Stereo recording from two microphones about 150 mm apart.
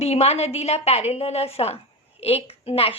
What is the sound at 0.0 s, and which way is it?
A woman's voice, 45° left (ahead or behind).